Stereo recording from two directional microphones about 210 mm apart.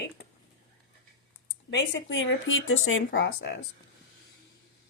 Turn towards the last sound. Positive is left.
turn(degrees=60)  # may be behind; listen again after turning